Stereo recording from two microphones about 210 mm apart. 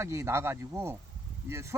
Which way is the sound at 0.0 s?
15° right (ahead or behind).